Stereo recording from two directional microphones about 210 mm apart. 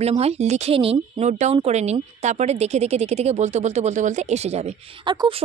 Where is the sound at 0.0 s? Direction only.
30° right (ahead or behind).